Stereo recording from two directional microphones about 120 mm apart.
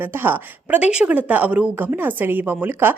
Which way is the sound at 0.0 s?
15° right (ahead or behind).